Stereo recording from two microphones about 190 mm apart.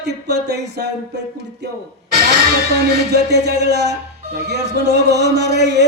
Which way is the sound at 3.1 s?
60° right (ahead or behind).